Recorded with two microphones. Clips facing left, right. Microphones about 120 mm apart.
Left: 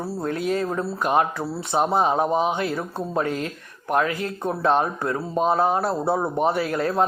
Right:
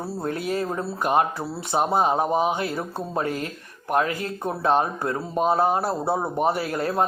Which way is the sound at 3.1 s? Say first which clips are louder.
Left 2 dB; 40° right (ahead or behind).